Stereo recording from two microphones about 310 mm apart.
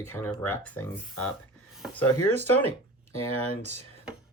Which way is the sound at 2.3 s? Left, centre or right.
Centre.